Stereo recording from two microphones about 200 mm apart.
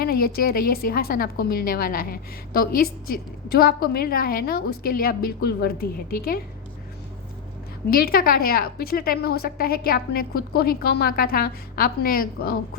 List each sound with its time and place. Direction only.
0.0 s a woman's voice: 50° left (ahead or behind)
7.9 s a woman's voice: 50° left (ahead or behind)